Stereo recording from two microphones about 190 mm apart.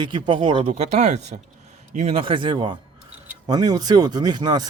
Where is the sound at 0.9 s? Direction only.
35° right (ahead or behind).